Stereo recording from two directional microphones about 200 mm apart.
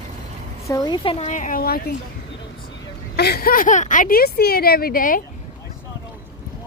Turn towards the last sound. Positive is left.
turn(degrees=45)  # may be behind; listen again after turning